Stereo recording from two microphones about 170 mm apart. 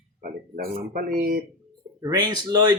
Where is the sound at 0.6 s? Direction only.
45° right (ahead or behind).